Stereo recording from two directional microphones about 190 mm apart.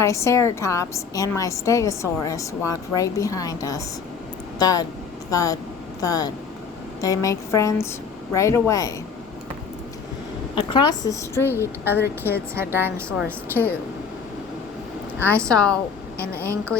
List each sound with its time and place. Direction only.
0.0 s a woman's voice: 15° left (ahead or behind)
10.5 s a woman's voice: 25° left (ahead or behind)
12.5 s a woman's voice: 10° right (ahead or behind)
13.5 s a woman's voice: 10° left (ahead or behind)
15.3 s a woman's voice: 5° left (ahead or behind)